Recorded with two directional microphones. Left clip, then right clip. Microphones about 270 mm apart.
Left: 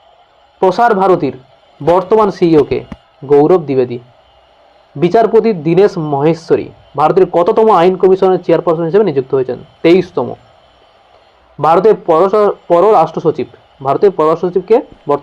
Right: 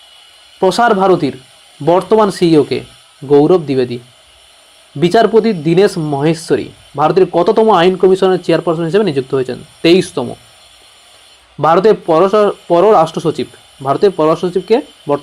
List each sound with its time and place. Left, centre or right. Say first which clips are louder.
0.6 s speech: left 1 dB; right
4.9 s speech: left 1 dB; right
11.6 s speech: left 1 dB; right